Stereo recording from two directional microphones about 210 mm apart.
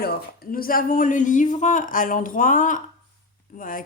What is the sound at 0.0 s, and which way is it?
Speech, 45° left (ahead or behind).